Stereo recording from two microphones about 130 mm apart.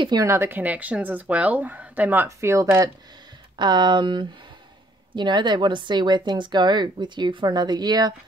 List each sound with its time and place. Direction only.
0.0 s speech: 30° right (ahead or behind)
3.5 s a woman's voice: 35° right (ahead or behind)